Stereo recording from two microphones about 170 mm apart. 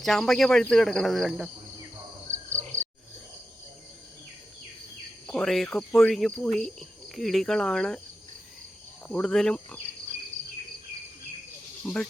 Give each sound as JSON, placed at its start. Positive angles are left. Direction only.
{"t": 0.0, "sound": "speech", "side_deg": 0}
{"t": 2.3, "sound": "cricket", "side_deg": -45}
{"t": 5.2, "sound": "speech", "side_deg": 5}
{"t": 9.0, "sound": "speech", "side_deg": 5}